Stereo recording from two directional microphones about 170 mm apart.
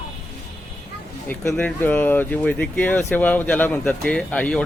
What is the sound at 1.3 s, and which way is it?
Speech, 5° left (ahead or behind).